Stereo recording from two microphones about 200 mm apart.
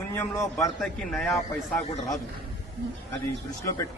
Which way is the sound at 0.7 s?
Centre (ahead or behind).